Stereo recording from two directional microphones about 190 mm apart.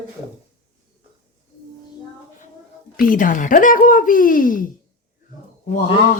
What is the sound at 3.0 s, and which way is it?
Speech, 45° left (ahead or behind).